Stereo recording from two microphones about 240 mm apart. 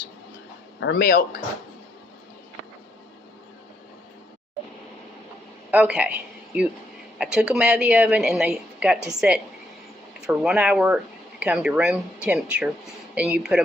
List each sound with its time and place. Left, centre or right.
0.8 s speech: left
5.7 s a man's voice: centre